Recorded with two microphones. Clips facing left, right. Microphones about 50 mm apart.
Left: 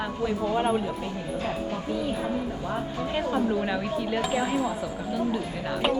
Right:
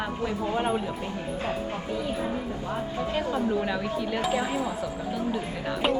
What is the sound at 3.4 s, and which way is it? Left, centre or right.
Speech, centre.